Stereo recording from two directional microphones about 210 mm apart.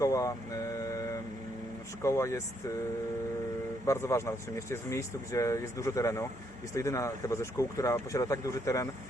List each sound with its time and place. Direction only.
0.0 s vehicle: 15° left (ahead or behind)
2.0 s speech: 15° left (ahead or behind)
3.8 s speech: 15° left (ahead or behind)